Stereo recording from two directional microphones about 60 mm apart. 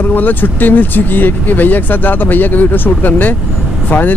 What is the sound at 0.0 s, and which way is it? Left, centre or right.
Speech, left.